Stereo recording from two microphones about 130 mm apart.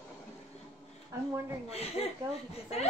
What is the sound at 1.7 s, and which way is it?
Speech, 50° left (ahead or behind).